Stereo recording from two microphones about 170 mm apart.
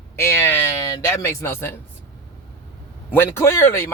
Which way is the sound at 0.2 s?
15° left (ahead or behind).